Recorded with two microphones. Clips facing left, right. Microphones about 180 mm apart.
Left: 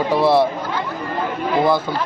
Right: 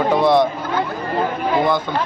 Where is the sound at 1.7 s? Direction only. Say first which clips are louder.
Left 1 dB; 5° left (ahead or behind).